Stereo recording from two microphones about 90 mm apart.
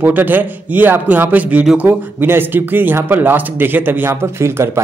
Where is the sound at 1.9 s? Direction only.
25° right (ahead or behind).